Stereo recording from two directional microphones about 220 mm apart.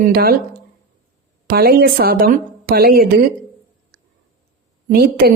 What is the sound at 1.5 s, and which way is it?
A woman's voice, 45° right (ahead or behind).